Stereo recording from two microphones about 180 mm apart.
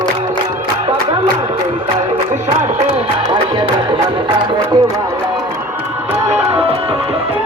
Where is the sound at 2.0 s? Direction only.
40° right (ahead or behind).